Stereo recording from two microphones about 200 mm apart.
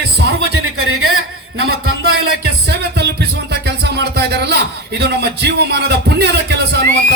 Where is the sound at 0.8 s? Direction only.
90° right.